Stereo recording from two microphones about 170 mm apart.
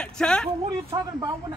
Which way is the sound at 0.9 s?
20° right (ahead or behind).